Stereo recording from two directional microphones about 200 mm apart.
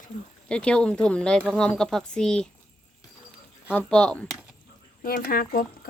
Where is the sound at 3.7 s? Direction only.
5° left (ahead or behind).